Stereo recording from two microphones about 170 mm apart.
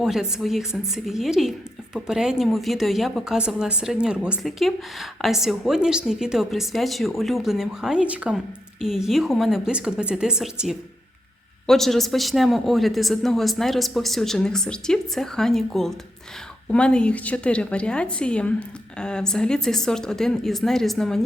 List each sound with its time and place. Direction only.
0.0 s a woman's voice: 5° right (ahead or behind)